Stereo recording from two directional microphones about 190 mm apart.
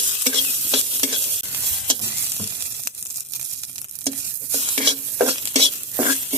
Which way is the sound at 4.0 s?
30° right (ahead or behind).